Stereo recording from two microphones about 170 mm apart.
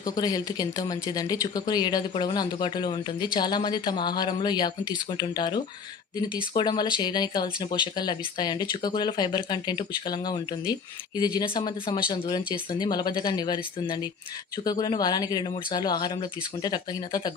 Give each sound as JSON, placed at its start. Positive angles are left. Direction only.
{"t": 0.0, "sound": "speech", "side_deg": 25}